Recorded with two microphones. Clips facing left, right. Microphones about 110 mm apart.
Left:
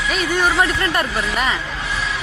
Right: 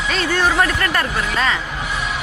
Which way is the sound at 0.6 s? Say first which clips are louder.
Even; 20° left (ahead or behind).